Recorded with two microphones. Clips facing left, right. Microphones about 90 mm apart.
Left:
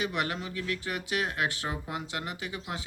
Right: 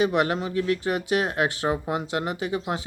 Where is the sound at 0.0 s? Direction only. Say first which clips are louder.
Right 9 dB; 30° right (ahead or behind).